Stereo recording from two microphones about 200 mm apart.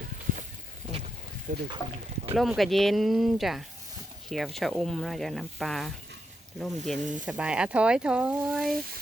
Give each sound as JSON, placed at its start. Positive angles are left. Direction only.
{"t": 1.5, "sound": "speech", "side_deg": -40}
{"t": 2.3, "sound": "speech", "side_deg": 0}
{"t": 7.0, "sound": "speech", "side_deg": -40}
{"t": 7.3, "sound": "speech", "side_deg": -5}